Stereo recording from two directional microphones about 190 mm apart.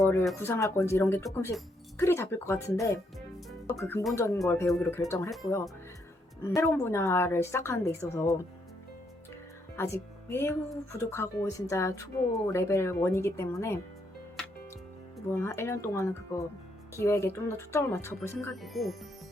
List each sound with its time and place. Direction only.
0.0 s speech: 15° left (ahead or behind)
3.7 s speech: 10° left (ahead or behind)
6.4 s speech: 15° left (ahead or behind)
9.7 s speech: 15° left (ahead or behind)
15.4 s speech: 15° left (ahead or behind)
18.3 s speech: centre (ahead or behind)